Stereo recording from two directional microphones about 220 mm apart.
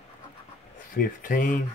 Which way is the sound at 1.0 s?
40° left (ahead or behind).